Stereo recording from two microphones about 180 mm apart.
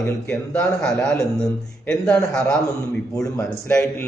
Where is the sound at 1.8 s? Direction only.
5° left (ahead or behind).